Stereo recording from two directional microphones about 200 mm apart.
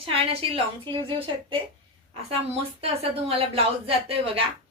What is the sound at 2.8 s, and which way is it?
A woman's voice, 30° right (ahead or behind).